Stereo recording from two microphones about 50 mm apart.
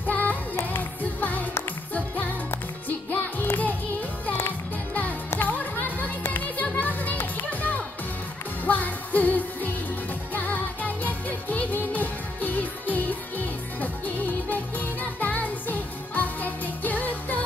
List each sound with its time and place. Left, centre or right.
0.1 s music: left
3.1 s music: left